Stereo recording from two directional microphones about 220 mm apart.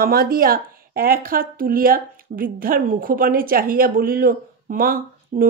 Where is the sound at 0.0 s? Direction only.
45° right (ahead or behind).